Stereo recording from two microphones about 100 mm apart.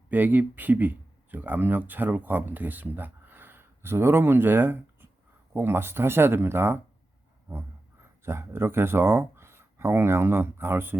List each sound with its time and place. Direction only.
0.1 s speech: 20° right (ahead or behind)
8.2 s speech: 25° right (ahead or behind)